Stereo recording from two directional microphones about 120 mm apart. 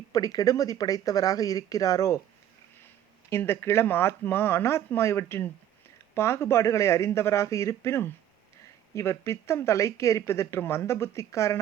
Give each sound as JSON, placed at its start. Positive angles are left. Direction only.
{"t": 0.1, "sound": "speech", "side_deg": 30}
{"t": 3.2, "sound": "speech", "side_deg": 20}